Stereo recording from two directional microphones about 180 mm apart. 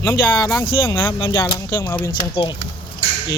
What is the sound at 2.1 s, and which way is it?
Speech, 25° left (ahead or behind).